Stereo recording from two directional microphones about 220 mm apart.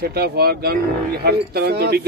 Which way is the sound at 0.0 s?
45° right (ahead or behind).